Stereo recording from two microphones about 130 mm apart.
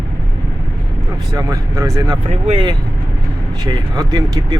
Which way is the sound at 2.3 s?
50° right (ahead or behind).